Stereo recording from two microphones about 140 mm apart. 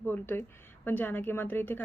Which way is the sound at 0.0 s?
15° left (ahead or behind).